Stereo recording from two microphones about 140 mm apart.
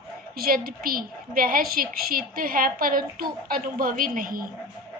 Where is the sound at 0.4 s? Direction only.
90° right.